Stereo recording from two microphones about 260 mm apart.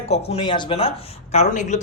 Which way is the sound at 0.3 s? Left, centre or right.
Centre.